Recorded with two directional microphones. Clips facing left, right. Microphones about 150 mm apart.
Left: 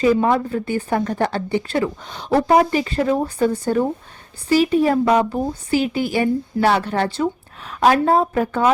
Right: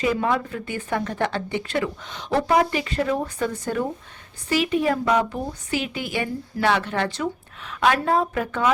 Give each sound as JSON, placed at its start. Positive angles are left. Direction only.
{"t": 0.0, "sound": "a woman's voice", "side_deg": 35}